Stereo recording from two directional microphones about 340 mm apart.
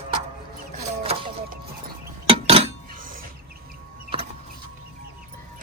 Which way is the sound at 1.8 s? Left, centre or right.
Centre.